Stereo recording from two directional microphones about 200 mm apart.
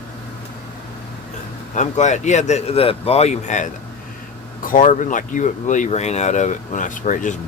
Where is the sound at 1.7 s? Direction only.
35° left (ahead or behind).